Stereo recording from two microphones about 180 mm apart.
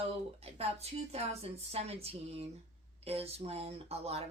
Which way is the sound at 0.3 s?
35° right (ahead or behind).